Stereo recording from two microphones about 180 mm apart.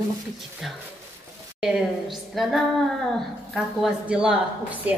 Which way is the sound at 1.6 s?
5° right (ahead or behind).